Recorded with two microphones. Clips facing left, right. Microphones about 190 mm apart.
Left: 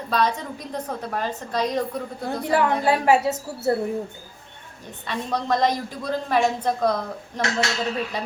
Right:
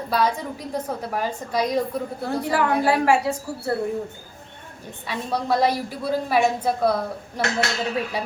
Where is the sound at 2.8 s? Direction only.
25° left (ahead or behind).